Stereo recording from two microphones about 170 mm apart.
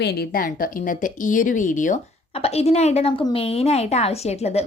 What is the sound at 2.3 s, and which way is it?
A woman's voice, 35° left (ahead or behind).